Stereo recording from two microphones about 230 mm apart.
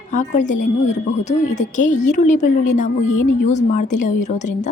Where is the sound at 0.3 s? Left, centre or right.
Left.